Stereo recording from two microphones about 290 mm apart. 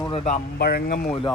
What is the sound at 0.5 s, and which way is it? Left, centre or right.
Speech, left.